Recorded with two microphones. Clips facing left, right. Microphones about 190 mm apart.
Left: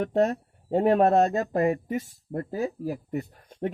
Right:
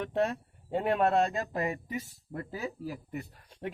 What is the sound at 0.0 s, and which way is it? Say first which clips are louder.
Speech: left 6 dB; 45° left (ahead or behind).